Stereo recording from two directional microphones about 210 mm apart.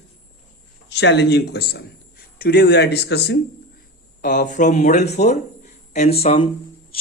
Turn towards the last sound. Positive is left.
turn(degrees=30)  # may be behind; listen again after turning